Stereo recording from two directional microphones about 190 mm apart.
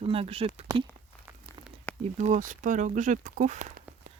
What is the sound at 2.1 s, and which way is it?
Speech, 40° right (ahead or behind).